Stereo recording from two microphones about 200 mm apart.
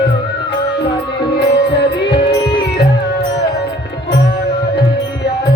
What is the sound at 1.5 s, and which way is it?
Music, 55° left (ahead or behind).